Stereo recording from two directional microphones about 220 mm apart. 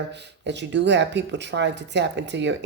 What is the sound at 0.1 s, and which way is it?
Speech, 50° right (ahead or behind).